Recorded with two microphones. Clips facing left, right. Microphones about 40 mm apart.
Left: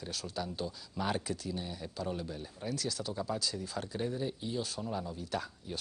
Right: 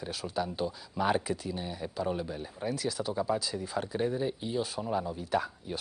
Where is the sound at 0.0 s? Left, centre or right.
Centre.